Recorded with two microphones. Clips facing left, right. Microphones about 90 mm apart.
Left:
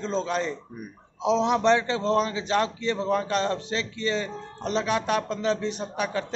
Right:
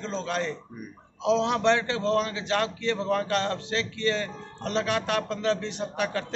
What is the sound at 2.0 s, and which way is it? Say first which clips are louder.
A man's voice: left 2 dB; 25° left (ahead or behind).